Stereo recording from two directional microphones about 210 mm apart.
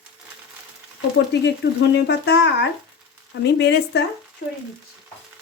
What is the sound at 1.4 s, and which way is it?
Speech, 55° left (ahead or behind).